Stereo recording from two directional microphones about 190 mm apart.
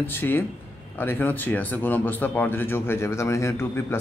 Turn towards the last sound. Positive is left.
turn(degrees=15)  # may be behind; listen again after turning